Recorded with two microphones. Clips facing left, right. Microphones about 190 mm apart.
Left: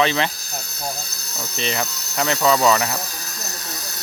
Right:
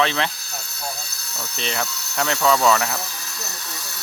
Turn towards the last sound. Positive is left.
turn(degrees=40)  # may be behind; listen again after turning